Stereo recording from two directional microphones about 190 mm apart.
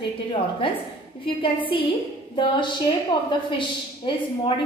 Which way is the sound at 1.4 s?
30° left (ahead or behind).